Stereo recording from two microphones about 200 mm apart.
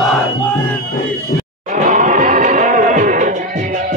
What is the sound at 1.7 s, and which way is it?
Music, 40° right (ahead or behind).